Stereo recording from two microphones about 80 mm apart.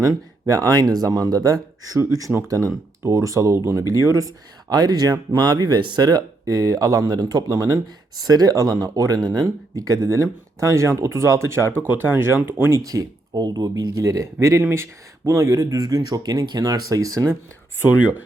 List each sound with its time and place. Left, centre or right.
0.0 s speech: right
12.7 s speech: right